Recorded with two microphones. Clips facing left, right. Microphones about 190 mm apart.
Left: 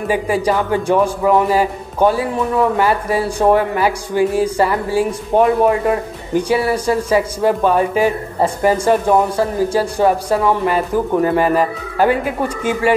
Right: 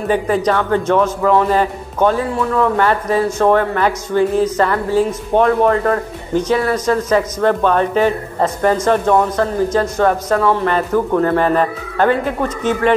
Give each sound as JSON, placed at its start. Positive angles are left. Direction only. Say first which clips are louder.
{"t": 0.1, "sound": "speech", "louder": "right 1 dB", "side_deg": 10}